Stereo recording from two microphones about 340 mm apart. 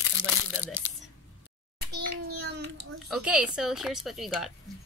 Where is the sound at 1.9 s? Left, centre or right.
Right.